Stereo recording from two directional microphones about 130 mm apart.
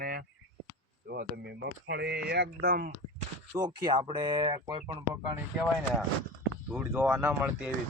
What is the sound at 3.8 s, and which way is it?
Speech, 35° right (ahead or behind).